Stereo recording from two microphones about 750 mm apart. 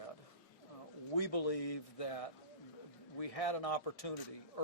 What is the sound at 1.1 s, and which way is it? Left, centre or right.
A man's voice, left.